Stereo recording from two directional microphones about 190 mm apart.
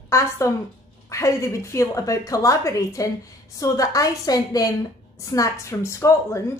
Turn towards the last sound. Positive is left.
turn(degrees=15)  # may be behind; listen again after turning